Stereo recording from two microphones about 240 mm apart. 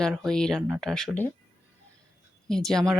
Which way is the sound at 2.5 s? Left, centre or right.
Centre.